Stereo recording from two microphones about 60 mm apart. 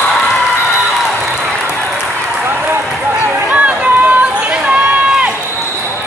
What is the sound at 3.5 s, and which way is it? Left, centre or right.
Run, right.